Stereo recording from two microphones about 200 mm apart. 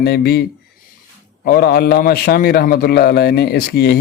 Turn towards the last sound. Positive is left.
turn(degrees=50)  # may be behind; listen again after turning